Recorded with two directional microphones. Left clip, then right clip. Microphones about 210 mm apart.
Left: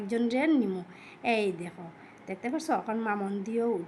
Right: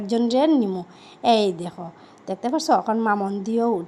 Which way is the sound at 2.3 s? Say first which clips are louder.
Right 10 dB; 25° right (ahead or behind).